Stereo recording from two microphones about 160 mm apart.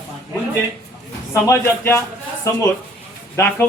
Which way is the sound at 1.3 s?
15° left (ahead or behind).